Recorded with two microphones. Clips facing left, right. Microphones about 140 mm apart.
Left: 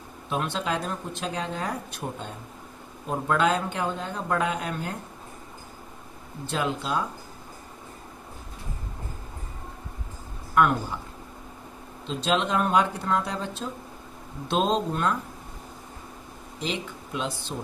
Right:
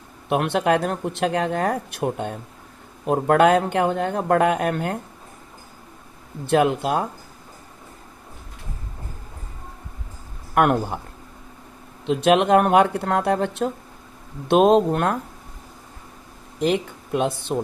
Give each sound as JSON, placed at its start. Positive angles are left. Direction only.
{"t": 0.3, "sound": "speech", "side_deg": -65}
{"t": 6.5, "sound": "speech", "side_deg": -60}
{"t": 10.5, "sound": "speech", "side_deg": -60}
{"t": 12.0, "sound": "speech", "side_deg": -65}
{"t": 16.6, "sound": "speech", "side_deg": -55}